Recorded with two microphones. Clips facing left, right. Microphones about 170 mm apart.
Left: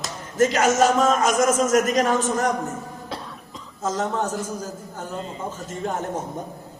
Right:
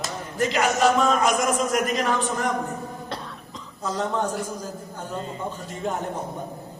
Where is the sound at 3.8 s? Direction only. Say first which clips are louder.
Left 1 dB; 45° left (ahead or behind).